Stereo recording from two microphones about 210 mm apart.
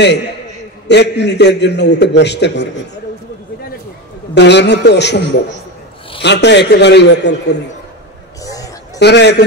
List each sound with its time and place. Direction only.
0.8 s a man's voice: 55° left (ahead or behind)
4.4 s a man's voice: 55° left (ahead or behind)
8.5 s a sound: 15° left (ahead or behind)
9.0 s a man's voice: 55° left (ahead or behind)